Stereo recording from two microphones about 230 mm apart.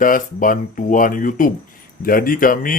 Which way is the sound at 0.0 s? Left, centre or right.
Left.